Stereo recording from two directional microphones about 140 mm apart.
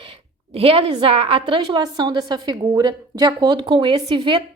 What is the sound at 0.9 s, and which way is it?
A woman's voice, 40° right (ahead or behind).